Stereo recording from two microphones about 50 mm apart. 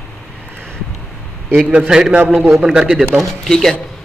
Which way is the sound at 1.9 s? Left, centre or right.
Centre.